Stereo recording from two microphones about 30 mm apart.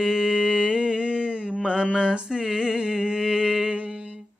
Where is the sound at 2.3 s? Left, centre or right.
Right.